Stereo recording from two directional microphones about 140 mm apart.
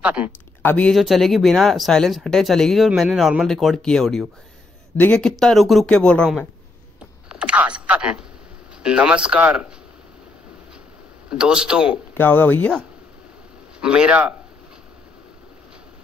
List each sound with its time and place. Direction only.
0.0 s speech: 10° right (ahead or behind)
0.6 s speech: 10° left (ahead or behind)
0.9 s speech: centre (ahead or behind)
7.2 s speech: 5° right (ahead or behind)
11.2 s speech: 5° right (ahead or behind)
12.1 s speech: 15° left (ahead or behind)
13.7 s speech: 5° right (ahead or behind)